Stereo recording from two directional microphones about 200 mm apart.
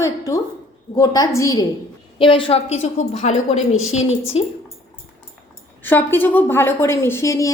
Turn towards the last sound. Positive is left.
turn(degrees=15)  # may be behind; listen again after turning